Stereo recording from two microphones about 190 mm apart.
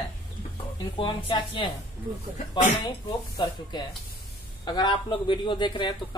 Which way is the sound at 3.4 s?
25° left (ahead or behind).